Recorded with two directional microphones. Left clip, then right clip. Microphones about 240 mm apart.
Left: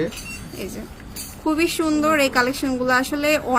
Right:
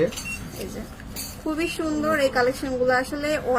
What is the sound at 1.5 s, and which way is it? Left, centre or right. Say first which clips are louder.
Speech: left 6 dB; left.